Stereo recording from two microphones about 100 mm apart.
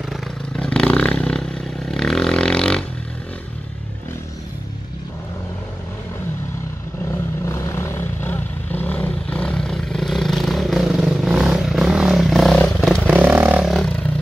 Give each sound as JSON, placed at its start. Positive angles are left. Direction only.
{"t": 0.6, "sound": "vehicle", "side_deg": 10}
{"t": 7.4, "sound": "vehicle", "side_deg": 30}
{"t": 13.0, "sound": "vehicle", "side_deg": -15}
{"t": 13.7, "sound": "a sound", "side_deg": 5}